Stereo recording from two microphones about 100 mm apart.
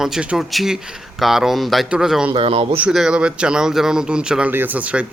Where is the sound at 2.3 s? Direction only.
65° right (ahead or behind).